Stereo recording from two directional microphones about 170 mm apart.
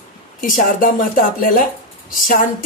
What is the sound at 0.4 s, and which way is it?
Speech, 55° left (ahead or behind).